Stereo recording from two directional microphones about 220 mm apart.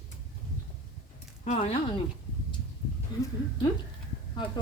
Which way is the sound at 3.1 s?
15° left (ahead or behind).